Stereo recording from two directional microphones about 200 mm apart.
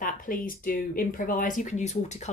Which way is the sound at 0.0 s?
45° left (ahead or behind).